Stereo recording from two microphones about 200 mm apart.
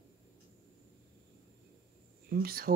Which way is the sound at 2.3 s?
50° right (ahead or behind).